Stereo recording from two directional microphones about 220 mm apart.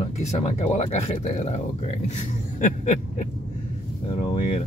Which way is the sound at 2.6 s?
35° left (ahead or behind).